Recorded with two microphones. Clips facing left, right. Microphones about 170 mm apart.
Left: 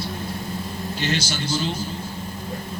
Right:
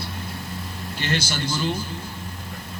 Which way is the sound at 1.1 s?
55° right (ahead or behind).